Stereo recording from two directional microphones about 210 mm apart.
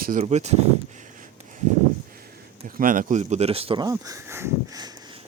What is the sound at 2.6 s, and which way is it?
Speech, 40° right (ahead or behind).